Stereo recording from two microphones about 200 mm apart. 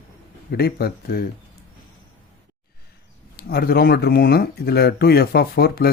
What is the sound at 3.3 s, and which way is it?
Speech, 50° left (ahead or behind).